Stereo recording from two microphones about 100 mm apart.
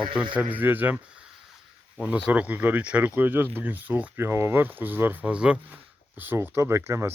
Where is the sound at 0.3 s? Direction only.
15° right (ahead or behind).